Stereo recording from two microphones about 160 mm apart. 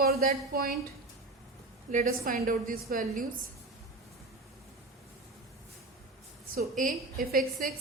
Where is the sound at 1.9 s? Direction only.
55° right (ahead or behind).